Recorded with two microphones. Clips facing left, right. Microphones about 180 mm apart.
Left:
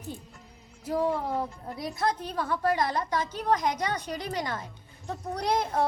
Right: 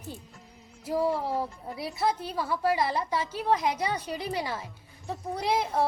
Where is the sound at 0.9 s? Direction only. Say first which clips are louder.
Even; 5° right (ahead or behind).